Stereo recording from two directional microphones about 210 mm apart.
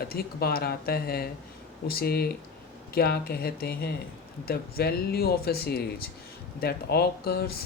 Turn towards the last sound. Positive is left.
turn(degrees=50)  # may be behind; listen again after turning